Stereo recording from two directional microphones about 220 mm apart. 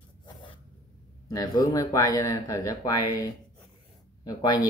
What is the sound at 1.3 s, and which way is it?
Speech, 15° left (ahead or behind).